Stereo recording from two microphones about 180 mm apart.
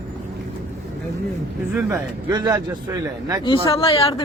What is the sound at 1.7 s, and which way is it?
A man's voice, 15° right (ahead or behind).